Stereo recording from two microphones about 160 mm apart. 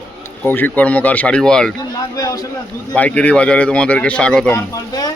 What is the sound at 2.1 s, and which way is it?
Speech, 20° left (ahead or behind).